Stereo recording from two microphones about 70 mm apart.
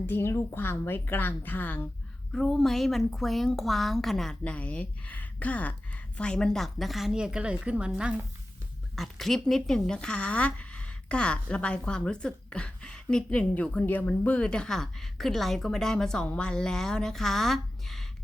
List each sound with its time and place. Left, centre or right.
0.0 s a woman's voice: left
2.3 s a woman's voice: centre
4.5 s a woman's voice: centre
9.0 s speech: centre